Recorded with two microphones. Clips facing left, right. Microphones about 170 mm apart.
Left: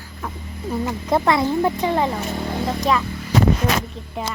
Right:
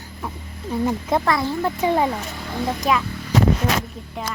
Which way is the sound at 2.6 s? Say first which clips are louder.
Even; centre (ahead or behind).